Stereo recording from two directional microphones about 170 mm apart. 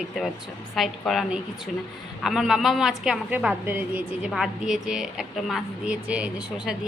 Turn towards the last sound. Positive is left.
turn(degrees=-5)  # may be behind; listen again after turning